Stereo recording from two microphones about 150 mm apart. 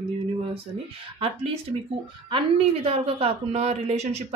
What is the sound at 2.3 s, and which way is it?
A woman's voice, 35° right (ahead or behind).